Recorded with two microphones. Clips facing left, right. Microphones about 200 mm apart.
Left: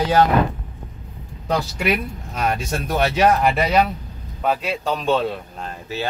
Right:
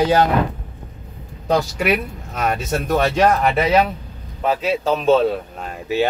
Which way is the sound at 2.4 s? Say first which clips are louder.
Right 2 dB; centre (ahead or behind).